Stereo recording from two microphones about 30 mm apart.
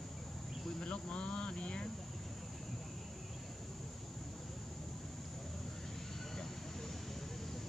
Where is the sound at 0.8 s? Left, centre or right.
Left.